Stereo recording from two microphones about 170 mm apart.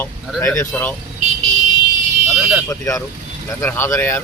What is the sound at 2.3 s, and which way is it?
Speech, 10° right (ahead or behind).